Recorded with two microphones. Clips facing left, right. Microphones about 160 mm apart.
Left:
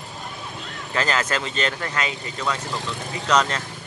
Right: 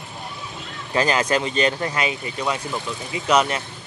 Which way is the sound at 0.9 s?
15° right (ahead or behind).